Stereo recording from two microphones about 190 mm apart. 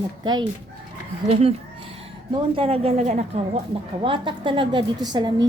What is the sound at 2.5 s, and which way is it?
Speech, 30° right (ahead or behind).